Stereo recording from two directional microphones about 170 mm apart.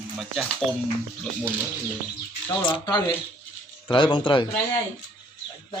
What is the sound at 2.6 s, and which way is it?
Speech, 30° left (ahead or behind).